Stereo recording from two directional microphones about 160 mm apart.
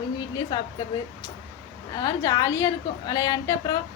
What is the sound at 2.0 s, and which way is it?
A woman's voice, 25° left (ahead or behind).